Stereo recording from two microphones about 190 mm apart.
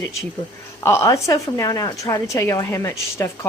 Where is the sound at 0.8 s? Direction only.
15° left (ahead or behind).